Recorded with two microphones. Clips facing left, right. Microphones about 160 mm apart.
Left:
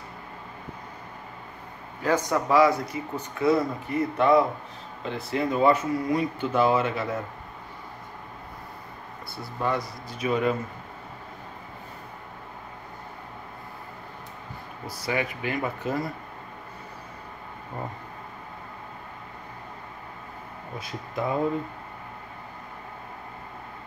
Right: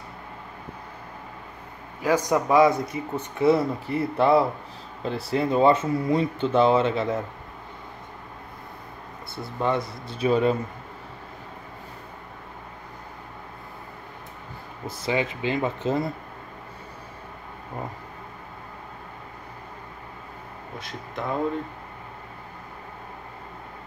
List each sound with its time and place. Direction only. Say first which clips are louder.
2.0 s speech: right 2 dB; 15° right (ahead or behind)
9.3 s speech: right 3 dB; 25° right (ahead or behind)
14.9 s speech: right 3 dB; 25° right (ahead or behind)
20.8 s speech: left 3 dB; 5° left (ahead or behind)